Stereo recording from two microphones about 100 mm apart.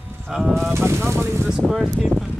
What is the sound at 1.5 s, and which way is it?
Speech, 5° right (ahead or behind).